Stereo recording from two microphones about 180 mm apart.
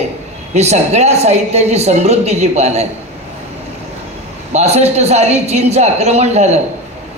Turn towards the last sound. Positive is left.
turn(degrees=-40)  # may be behind; listen again after turning